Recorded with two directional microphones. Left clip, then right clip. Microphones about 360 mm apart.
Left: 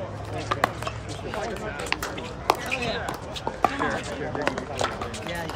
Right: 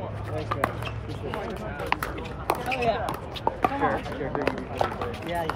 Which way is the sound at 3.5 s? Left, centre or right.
Right.